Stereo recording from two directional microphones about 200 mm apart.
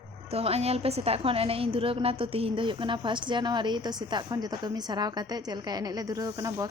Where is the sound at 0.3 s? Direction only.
30° right (ahead or behind).